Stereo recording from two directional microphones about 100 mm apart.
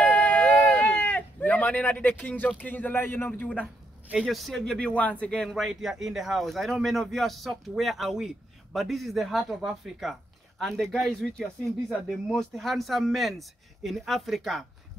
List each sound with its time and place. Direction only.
0.0 s a sound: 15° left (ahead or behind)
2.6 s speech: 20° left (ahead or behind)
4.2 s speech: centre (ahead or behind)